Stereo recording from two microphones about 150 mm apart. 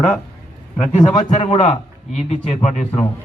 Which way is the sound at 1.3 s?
45° left (ahead or behind).